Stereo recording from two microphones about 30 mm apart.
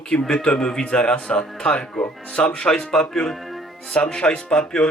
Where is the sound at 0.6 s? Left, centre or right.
Left.